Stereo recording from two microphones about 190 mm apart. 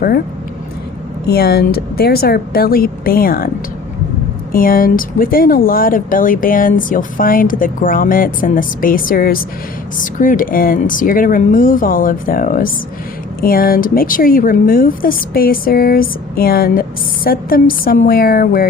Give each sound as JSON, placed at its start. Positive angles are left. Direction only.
{"t": 1.3, "sound": "speech", "side_deg": 55}
{"t": 4.5, "sound": "speech", "side_deg": 50}